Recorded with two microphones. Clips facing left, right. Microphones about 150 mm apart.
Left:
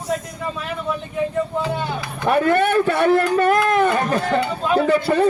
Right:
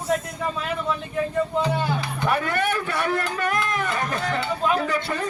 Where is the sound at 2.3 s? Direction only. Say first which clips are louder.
Left 7 dB; 30° left (ahead or behind).